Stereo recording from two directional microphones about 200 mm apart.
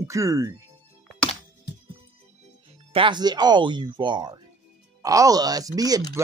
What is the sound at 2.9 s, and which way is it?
Speech, 25° right (ahead or behind).